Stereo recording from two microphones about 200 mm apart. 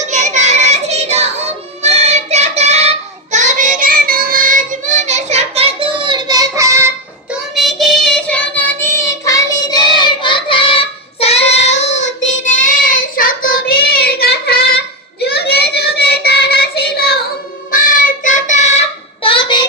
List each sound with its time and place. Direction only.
0.1 s child singing: 35° right (ahead or behind); by 7.3 s 15° right (ahead or behind)
7.5 s child singing: centre (ahead or behind); by 19.6 s 25° left (ahead or behind)